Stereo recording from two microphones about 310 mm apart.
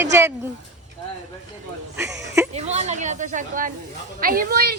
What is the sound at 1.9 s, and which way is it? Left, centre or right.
Speech, centre.